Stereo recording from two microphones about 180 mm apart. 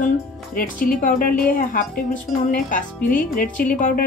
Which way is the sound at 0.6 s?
50° left (ahead or behind).